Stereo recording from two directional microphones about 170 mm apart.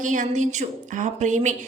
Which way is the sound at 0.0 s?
45° right (ahead or behind).